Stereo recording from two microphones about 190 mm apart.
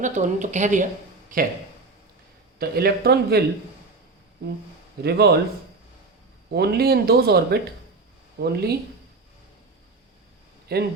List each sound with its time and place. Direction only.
0.0 s speech: 40° right (ahead or behind)
2.6 s speech: 55° right (ahead or behind)
5.0 s speech: 60° right (ahead or behind)
6.5 s speech: 60° right (ahead or behind)
10.7 s speech: 55° right (ahead or behind)